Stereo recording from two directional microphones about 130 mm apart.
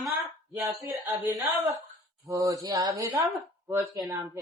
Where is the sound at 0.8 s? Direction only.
30° right (ahead or behind).